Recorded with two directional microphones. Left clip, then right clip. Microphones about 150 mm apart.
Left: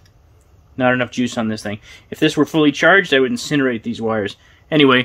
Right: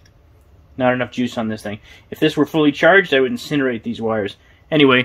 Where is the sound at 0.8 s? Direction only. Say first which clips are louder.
Left 1 dB; 35° left (ahead or behind).